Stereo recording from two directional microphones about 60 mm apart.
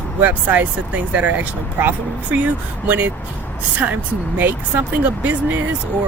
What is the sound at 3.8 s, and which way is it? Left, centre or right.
Speech, right.